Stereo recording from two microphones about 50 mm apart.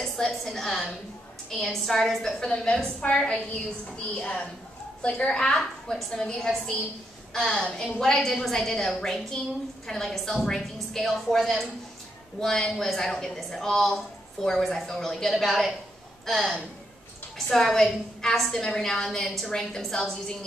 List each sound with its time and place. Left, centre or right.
0.0 s a woman's voice: centre